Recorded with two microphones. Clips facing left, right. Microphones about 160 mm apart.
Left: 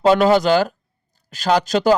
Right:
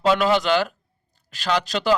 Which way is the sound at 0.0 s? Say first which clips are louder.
Left 5 dB; 40° left (ahead or behind).